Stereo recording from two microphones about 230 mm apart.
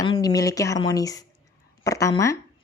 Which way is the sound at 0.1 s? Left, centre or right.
Centre.